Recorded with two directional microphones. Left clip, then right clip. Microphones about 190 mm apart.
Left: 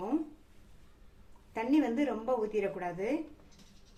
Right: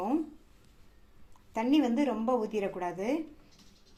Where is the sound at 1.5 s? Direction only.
35° right (ahead or behind).